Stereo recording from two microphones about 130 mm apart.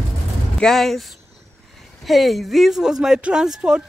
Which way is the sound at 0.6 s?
5° left (ahead or behind).